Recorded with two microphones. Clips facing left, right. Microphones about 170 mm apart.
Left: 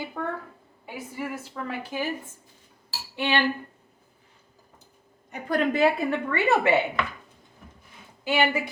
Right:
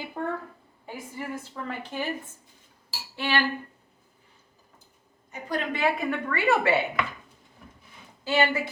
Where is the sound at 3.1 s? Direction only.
20° left (ahead or behind).